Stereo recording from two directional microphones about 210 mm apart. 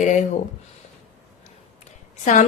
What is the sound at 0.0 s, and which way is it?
Speech, 35° left (ahead or behind).